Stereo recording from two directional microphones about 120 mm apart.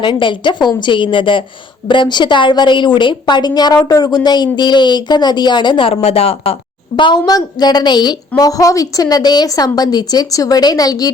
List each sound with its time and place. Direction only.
0.0 s a woman's voice: 45° left (ahead or behind)